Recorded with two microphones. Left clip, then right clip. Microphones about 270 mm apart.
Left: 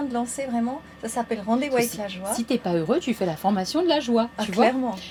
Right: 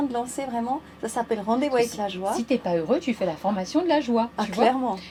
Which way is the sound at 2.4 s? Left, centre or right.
Left.